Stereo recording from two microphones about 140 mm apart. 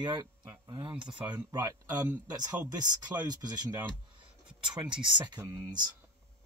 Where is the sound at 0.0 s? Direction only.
30° right (ahead or behind).